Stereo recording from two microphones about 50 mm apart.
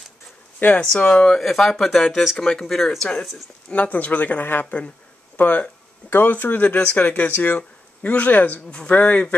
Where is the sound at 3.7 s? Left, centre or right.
Left.